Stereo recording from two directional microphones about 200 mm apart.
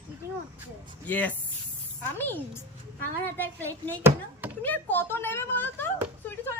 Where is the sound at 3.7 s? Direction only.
15° right (ahead or behind).